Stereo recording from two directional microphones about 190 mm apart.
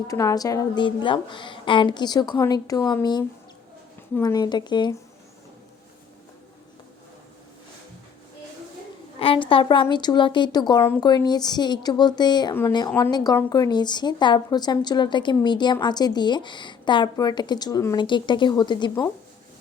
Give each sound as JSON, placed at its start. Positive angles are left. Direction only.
{"t": 0.1, "sound": "a woman's voice", "side_deg": 15}
{"t": 9.1, "sound": "a woman's voice", "side_deg": 30}